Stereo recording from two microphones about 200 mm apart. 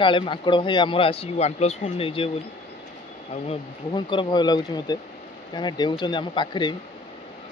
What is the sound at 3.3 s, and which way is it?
Speech, 25° left (ahead or behind).